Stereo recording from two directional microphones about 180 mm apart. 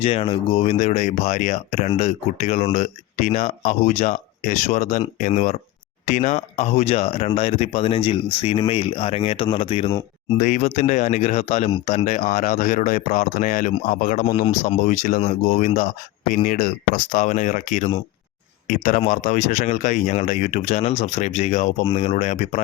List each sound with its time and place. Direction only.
0.0 s speech: 30° left (ahead or behind)
14.4 s speech: 35° left (ahead or behind)